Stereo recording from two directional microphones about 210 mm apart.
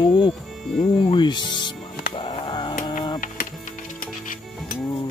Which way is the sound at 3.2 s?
40° left (ahead or behind).